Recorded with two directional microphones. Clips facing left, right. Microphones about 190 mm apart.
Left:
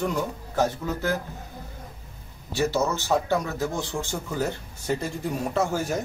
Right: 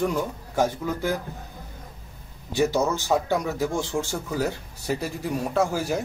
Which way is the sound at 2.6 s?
15° right (ahead or behind).